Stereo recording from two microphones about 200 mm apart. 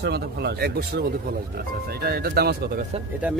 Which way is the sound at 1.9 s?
50° right (ahead or behind).